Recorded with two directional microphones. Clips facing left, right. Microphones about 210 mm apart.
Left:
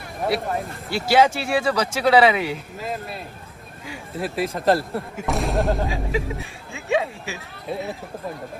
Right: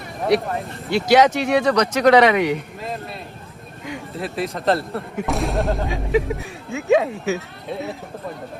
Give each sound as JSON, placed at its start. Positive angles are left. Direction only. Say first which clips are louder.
{"t": 0.3, "sound": "speech", "louder": "right 5 dB", "side_deg": 0}